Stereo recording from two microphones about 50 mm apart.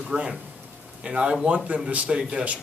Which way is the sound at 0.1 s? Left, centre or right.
Right.